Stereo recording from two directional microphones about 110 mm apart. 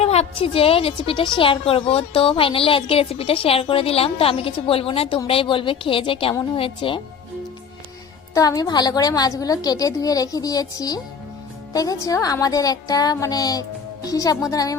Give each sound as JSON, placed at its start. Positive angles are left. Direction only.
{"t": 0.0, "sound": "a woman's voice", "side_deg": 70}
{"t": 8.3, "sound": "a woman's voice", "side_deg": 35}